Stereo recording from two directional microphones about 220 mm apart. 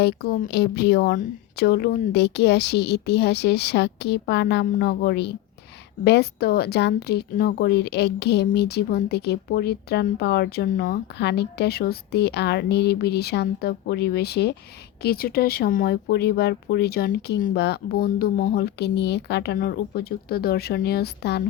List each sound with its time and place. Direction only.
0.0 s speech: 45° left (ahead or behind)